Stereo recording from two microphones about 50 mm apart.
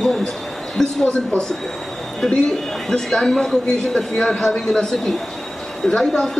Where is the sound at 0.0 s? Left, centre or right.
Centre.